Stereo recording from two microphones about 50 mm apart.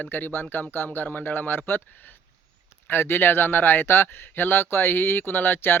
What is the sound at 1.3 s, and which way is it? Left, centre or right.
Speech, left.